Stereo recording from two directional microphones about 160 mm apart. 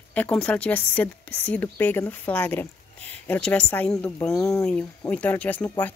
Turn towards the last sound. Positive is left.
turn(degrees=10)  # may be behind; listen again after turning